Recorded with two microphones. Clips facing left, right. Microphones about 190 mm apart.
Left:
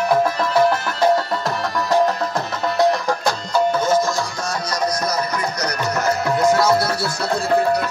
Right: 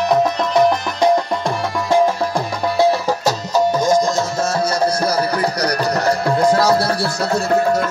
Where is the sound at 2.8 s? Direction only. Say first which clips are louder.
Right 2 dB; 5° right (ahead or behind).